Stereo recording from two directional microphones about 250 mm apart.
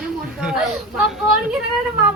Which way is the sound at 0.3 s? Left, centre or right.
Centre.